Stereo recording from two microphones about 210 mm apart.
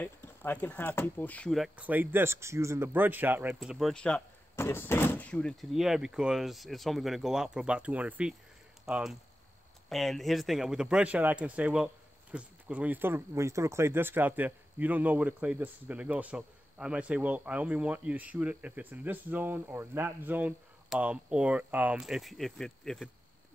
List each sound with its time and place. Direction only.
0.0 s speech: 10° left (ahead or behind)